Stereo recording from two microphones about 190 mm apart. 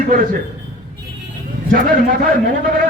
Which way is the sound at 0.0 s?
50° right (ahead or behind).